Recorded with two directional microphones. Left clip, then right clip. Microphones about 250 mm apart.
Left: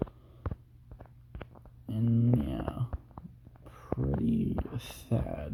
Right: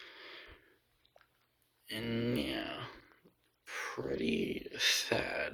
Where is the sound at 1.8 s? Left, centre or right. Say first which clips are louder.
Left 4 dB; centre.